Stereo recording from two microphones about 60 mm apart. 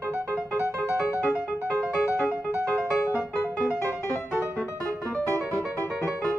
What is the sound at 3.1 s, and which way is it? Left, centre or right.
Music, left.